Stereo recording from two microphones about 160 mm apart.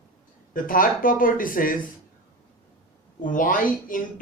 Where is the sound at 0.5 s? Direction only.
60° left (ahead or behind).